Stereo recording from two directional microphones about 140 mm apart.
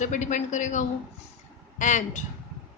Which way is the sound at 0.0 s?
60° left (ahead or behind).